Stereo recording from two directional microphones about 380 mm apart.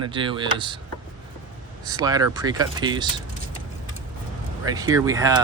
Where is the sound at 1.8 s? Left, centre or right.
Centre.